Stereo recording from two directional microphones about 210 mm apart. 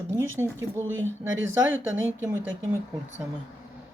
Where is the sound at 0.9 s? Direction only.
65° right (ahead or behind).